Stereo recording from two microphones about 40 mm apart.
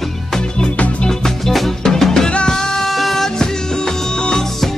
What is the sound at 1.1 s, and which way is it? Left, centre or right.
Music, centre.